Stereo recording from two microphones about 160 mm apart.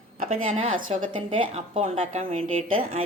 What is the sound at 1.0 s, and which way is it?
Speech, 30° right (ahead or behind).